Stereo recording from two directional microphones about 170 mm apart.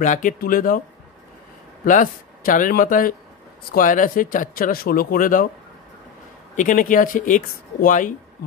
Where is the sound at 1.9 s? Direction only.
50° left (ahead or behind).